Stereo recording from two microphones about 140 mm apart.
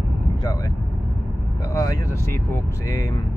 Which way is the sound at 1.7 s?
25° left (ahead or behind).